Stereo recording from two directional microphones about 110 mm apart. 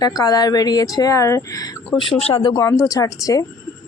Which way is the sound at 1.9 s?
50° left (ahead or behind).